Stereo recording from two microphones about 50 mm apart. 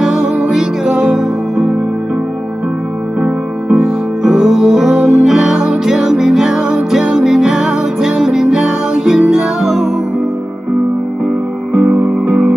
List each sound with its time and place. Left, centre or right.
0.0 s music: centre
3.2 s music: right
3.8 s music: centre
11.9 s music: right